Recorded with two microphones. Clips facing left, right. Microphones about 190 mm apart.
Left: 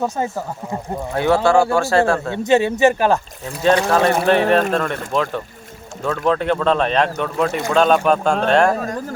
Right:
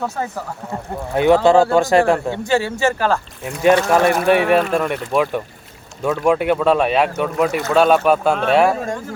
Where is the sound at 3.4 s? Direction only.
15° right (ahead or behind).